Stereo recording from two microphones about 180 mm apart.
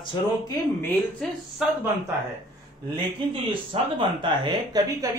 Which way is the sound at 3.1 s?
25° right (ahead or behind).